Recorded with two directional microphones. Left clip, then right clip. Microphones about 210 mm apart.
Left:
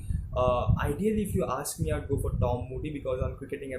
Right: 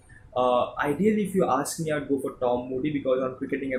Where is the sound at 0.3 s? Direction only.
15° left (ahead or behind).